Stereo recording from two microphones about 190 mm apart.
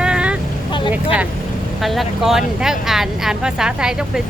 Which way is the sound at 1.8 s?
Centre (ahead or behind).